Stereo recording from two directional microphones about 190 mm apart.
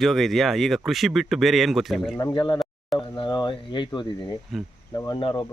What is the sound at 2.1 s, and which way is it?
Speech, 20° left (ahead or behind).